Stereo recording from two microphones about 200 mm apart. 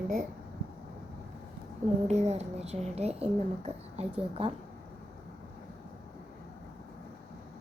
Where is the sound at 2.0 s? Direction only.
35° right (ahead or behind).